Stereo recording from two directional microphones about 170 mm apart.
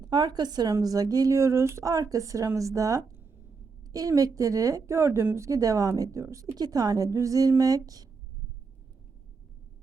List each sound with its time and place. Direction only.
0.0 s a woman's voice: 25° right (ahead or behind)